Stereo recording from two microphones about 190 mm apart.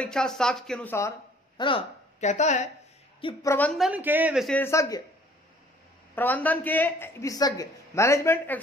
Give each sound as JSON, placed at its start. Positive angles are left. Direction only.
{"t": 0.0, "sound": "speech", "side_deg": 5}
{"t": 1.6, "sound": "speech", "side_deg": 30}
{"t": 3.4, "sound": "speech", "side_deg": 10}
{"t": 4.6, "sound": "a man's voice", "side_deg": 15}
{"t": 6.1, "sound": "a man's voice", "side_deg": 10}